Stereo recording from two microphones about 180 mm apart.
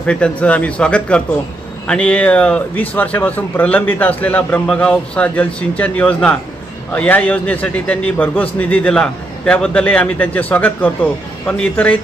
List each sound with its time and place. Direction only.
0.0 s a man's voice: 5° left (ahead or behind)